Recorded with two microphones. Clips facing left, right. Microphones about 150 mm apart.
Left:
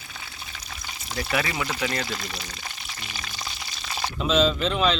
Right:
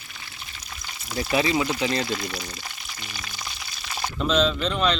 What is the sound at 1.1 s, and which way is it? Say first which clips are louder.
Speech: right 5 dB; 25° right (ahead or behind).